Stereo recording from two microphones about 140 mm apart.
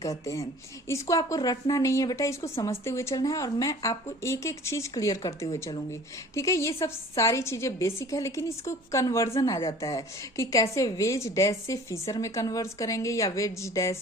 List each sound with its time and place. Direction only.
0.0 s a woman's voice: 25° left (ahead or behind)